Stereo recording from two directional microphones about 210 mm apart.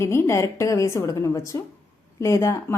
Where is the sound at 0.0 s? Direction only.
10° left (ahead or behind).